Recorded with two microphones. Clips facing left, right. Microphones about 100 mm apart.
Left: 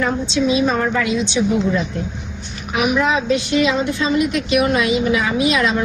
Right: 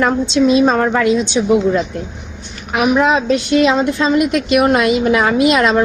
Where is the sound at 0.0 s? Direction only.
50° right (ahead or behind).